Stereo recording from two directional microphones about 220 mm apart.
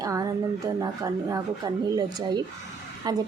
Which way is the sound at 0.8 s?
15° right (ahead or behind).